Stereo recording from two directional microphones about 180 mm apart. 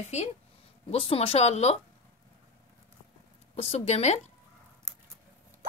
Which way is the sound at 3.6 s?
35° left (ahead or behind).